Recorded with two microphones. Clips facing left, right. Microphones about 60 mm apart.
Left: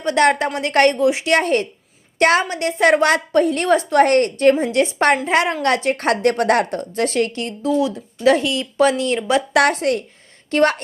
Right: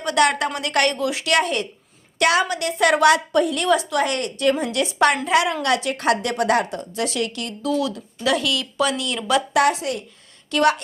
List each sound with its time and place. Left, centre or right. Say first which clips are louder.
0.0 s a woman's voice: left 3 dB; left
4.5 s a woman's voice: left 5 dB; left
9.5 s speech: left 5 dB; left
10.5 s a woman's voice: left 2 dB; left